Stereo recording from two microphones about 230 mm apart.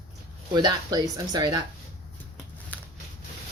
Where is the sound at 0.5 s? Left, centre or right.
Centre.